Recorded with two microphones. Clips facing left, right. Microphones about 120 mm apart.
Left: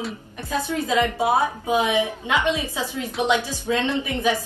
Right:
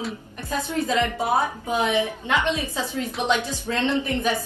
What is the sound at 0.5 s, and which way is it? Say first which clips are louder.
A woman's voice: left 1 dB; 15° left (ahead or behind).